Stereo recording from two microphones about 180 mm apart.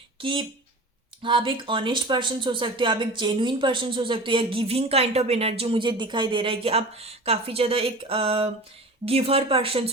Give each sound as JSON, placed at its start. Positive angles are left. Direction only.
{"t": 0.2, "sound": "speech", "side_deg": -30}